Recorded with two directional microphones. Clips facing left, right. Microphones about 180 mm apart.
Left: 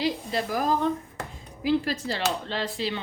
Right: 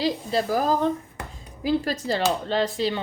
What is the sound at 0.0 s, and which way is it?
Speech, 35° right (ahead or behind).